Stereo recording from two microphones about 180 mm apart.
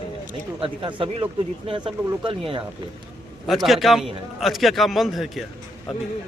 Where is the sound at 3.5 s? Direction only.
Centre (ahead or behind).